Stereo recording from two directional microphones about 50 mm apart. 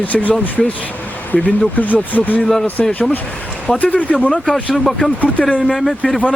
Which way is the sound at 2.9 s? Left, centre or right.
Left.